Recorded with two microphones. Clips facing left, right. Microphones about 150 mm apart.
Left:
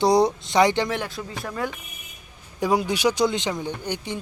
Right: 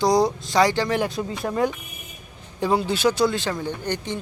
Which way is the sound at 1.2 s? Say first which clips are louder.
Right 6 dB; 25° right (ahead or behind).